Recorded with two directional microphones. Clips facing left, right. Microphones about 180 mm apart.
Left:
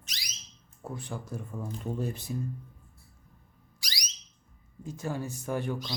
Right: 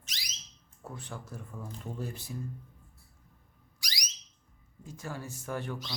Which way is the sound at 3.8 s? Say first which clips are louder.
Even; 30° left (ahead or behind).